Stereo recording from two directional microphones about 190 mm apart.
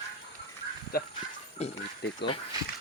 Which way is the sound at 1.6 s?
35° left (ahead or behind).